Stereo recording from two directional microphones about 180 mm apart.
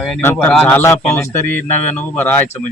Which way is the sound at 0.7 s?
10° left (ahead or behind).